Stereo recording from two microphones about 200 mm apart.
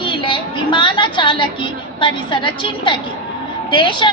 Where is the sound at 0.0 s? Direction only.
25° left (ahead or behind).